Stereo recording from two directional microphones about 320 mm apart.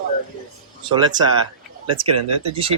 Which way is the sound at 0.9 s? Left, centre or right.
Centre.